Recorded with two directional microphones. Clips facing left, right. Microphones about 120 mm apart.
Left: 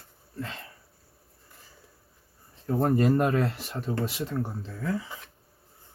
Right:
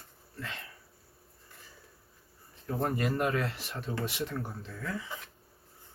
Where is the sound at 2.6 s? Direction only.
35° left (ahead or behind).